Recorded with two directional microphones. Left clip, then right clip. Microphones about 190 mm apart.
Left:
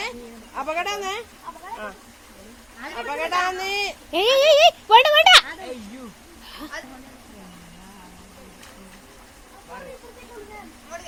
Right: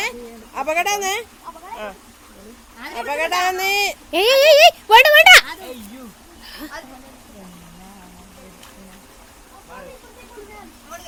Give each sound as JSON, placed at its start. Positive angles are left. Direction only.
{"t": 0.5, "sound": "a woman's voice", "side_deg": -50}
{"t": 3.1, "sound": "speech", "side_deg": -50}
{"t": 4.1, "sound": "a child's voice", "side_deg": -20}
{"t": 6.4, "sound": "a sound", "side_deg": -15}